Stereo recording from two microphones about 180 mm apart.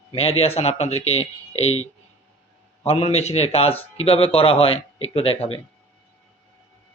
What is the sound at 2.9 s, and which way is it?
A man's voice, 35° left (ahead or behind).